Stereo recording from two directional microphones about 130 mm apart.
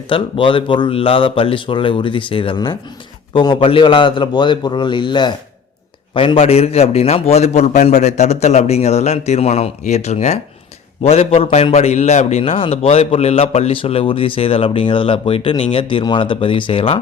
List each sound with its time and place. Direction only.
0.1 s a man's voice: 40° left (ahead or behind)